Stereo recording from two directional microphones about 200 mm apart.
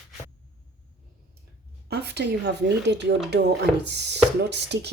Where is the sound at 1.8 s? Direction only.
55° right (ahead or behind).